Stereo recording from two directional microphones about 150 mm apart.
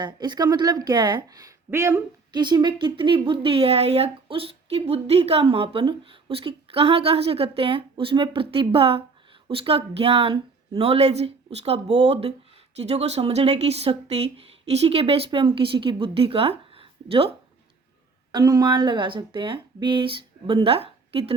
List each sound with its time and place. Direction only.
0.0 s speech: 30° right (ahead or behind)
2.3 s speech: 30° right (ahead or behind)
18.3 s speech: 25° right (ahead or behind)